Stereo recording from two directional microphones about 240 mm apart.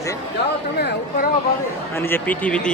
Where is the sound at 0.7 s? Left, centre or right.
Left.